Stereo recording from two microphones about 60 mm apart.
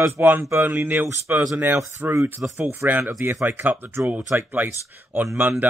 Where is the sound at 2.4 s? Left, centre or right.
Right.